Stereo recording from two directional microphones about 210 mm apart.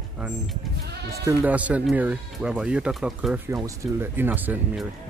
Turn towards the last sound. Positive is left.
turn(degrees=-5)  # may be behind; listen again after turning